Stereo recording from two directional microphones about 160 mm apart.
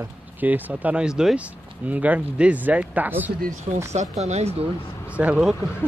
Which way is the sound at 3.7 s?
40° right (ahead or behind).